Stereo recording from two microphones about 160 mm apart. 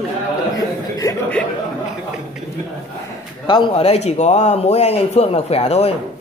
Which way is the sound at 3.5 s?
35° left (ahead or behind).